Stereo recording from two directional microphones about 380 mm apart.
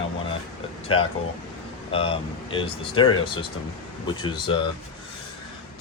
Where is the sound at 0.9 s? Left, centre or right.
Centre.